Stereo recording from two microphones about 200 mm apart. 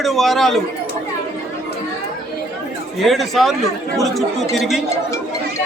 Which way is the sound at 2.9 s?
Centre (ahead or behind).